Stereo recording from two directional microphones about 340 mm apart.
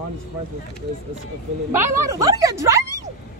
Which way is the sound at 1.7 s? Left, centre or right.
Centre.